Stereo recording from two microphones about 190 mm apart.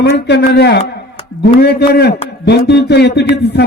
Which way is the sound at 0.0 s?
65° left (ahead or behind).